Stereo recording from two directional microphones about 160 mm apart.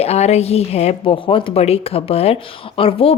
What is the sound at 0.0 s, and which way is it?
A woman's voice, 40° left (ahead or behind).